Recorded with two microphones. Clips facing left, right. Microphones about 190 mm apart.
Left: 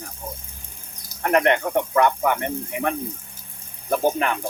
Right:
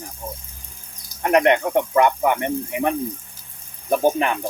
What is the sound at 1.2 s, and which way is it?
Speech, 15° right (ahead or behind).